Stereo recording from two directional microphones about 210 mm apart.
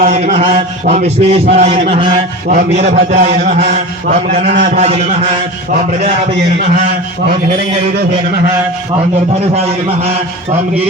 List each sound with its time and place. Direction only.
0.0 s a man's voice: 35° right (ahead or behind)
2.8 s a man's voice: 50° right (ahead or behind); by 5.1 s 30° right (ahead or behind)